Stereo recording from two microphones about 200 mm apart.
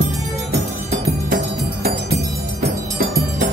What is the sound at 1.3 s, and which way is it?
Music, 50° right (ahead or behind).